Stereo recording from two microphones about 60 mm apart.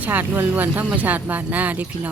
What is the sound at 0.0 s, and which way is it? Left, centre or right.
Speech, right.